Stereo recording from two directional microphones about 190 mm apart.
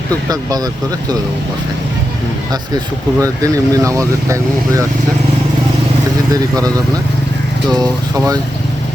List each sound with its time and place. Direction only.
0.3 s speech: 20° right (ahead or behind)
3.2 s speech: 15° right (ahead or behind)
6.3 s speech: 20° right (ahead or behind)